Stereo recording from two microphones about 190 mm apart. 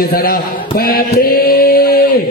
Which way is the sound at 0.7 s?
55° left (ahead or behind).